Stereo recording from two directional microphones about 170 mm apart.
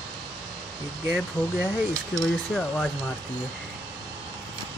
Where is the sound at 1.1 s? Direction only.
Centre (ahead or behind).